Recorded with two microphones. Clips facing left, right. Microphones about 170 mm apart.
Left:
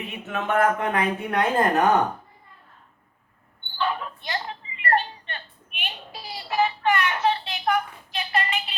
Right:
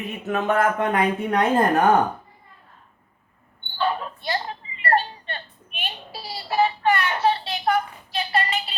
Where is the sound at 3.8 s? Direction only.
35° right (ahead or behind).